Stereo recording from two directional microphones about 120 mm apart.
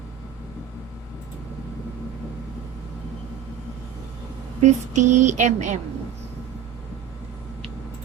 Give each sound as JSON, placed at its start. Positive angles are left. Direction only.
{"t": 4.6, "sound": "a woman's voice", "side_deg": -80}